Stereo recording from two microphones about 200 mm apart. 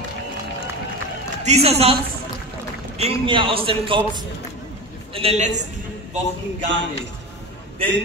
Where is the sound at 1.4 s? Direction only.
30° right (ahead or behind).